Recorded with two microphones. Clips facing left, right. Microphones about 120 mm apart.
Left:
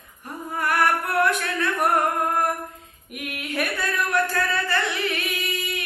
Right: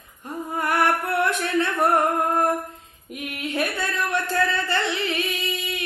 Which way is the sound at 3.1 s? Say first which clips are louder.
Right 1 dB; 25° right (ahead or behind).